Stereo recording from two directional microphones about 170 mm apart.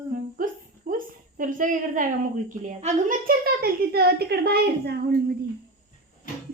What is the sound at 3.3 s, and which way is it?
A child's voice, 65° right (ahead or behind).